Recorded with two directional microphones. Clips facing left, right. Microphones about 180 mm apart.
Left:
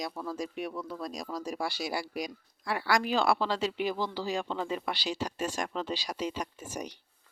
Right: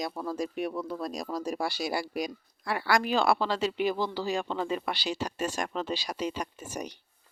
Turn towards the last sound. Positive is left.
turn(degrees=-65)  # may be behind; listen again after turning